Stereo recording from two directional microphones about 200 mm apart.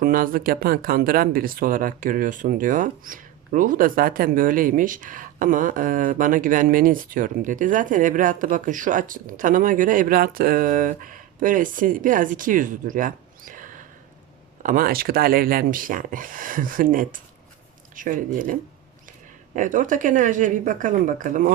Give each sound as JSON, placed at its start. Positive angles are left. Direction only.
{"t": 0.0, "sound": "speech", "side_deg": -45}
{"t": 19.5, "sound": "speech", "side_deg": -40}